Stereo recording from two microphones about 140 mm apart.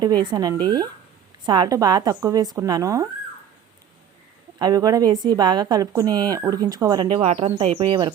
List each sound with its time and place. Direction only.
0.0 s speech: 30° right (ahead or behind)
4.6 s speech: 25° right (ahead or behind)
7.1 s speech: 45° right (ahead or behind)